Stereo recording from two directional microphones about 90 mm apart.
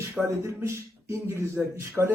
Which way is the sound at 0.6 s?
30° right (ahead or behind).